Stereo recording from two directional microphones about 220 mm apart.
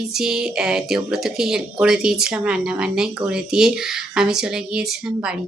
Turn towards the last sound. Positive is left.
turn(degrees=-5)  # may be behind; listen again after turning